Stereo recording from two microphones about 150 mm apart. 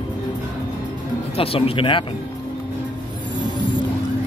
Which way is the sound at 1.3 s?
40° left (ahead or behind).